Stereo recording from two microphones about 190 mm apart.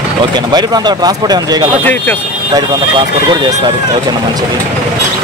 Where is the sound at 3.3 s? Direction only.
20° right (ahead or behind).